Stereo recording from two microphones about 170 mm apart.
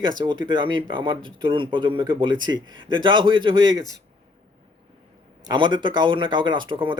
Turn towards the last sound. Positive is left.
turn(degrees=-30)  # may be behind; listen again after turning